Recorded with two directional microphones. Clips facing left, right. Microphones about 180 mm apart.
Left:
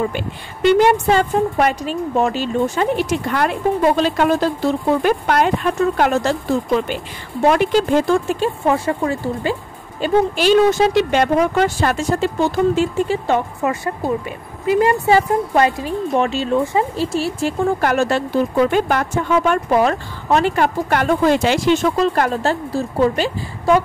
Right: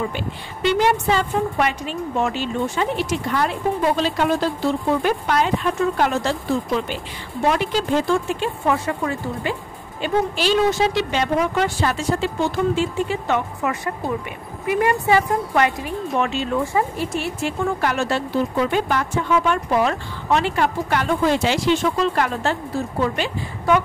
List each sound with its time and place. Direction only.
0.1 s speech: 50° left (ahead or behind)
7.4 s speech: 55° left (ahead or behind); by 23.8 s 35° left (ahead or behind)